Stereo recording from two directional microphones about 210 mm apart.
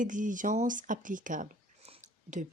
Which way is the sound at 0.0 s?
40° right (ahead or behind).